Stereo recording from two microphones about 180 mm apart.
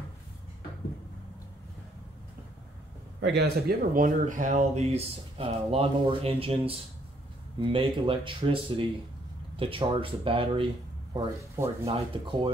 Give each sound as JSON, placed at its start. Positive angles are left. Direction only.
{"t": 3.2, "sound": "speech", "side_deg": -70}
{"t": 11.1, "sound": "speech", "side_deg": -15}
{"t": 11.8, "sound": "speech", "side_deg": -30}